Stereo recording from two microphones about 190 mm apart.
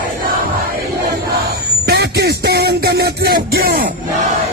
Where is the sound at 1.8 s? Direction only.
60° right (ahead or behind).